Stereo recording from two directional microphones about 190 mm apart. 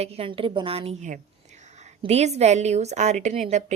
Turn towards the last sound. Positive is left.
turn(degrees=-35)  # may be behind; listen again after turning